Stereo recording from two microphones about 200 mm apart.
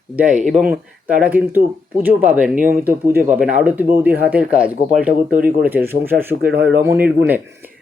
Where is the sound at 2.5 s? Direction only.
45° right (ahead or behind).